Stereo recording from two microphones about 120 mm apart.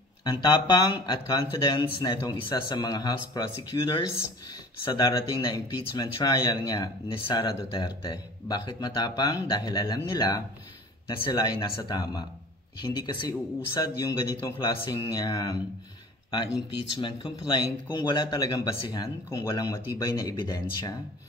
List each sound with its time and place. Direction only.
0.2 s speech: 35° left (ahead or behind)
4.9 s speech: 40° left (ahead or behind)
20.2 s speech: 35° left (ahead or behind)